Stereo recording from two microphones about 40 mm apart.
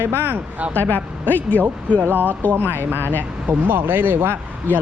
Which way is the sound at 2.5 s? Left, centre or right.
Right.